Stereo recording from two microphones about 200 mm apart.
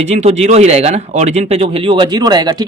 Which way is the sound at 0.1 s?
35° right (ahead or behind).